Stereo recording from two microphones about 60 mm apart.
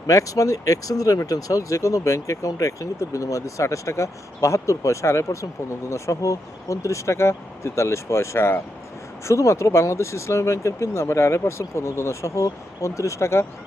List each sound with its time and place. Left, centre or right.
0.1 s speech: left
9.2 s speech: left